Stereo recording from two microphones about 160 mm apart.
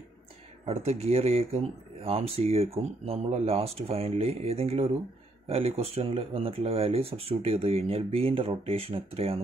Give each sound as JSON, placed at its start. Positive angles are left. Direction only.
{"t": 0.7, "sound": "speech", "side_deg": -40}